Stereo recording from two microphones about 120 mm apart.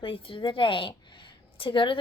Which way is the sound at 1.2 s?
45° left (ahead or behind).